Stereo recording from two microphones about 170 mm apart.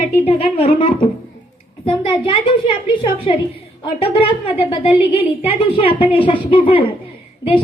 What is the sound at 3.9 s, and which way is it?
A woman's voice, 30° left (ahead or behind).